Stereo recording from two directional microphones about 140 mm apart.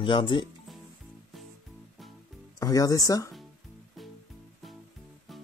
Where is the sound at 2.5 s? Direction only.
25° left (ahead or behind).